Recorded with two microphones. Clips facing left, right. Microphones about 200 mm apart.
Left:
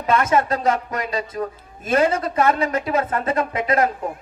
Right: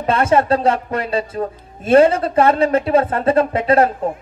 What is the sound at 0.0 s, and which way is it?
Speech, 30° right (ahead or behind).